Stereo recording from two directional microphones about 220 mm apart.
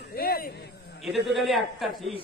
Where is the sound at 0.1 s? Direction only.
45° left (ahead or behind).